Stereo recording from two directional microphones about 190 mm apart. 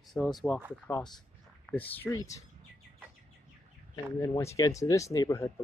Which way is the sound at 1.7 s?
5° left (ahead or behind).